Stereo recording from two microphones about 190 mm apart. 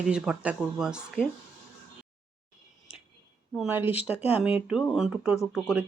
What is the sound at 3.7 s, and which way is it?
Speech, 10° right (ahead or behind).